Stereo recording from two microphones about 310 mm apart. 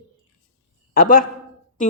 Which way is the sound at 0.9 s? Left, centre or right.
Left.